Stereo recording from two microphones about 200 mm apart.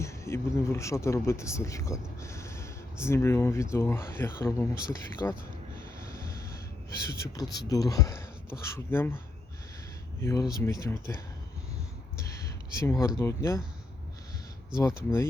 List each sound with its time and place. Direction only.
0.0 s speech: 15° left (ahead or behind)
6.2 s snort: 15° left (ahead or behind)
7.3 s speech: 20° left (ahead or behind)
12.2 s speech: 15° left (ahead or behind)
14.8 s speech: 15° left (ahead or behind)